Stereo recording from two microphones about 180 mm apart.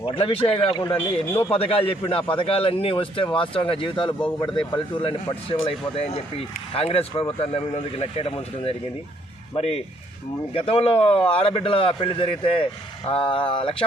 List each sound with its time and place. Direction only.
0.0 s a man's voice: 30° left (ahead or behind); by 1.5 s 15° left (ahead or behind)
1.5 s a man's voice: 30° left (ahead or behind)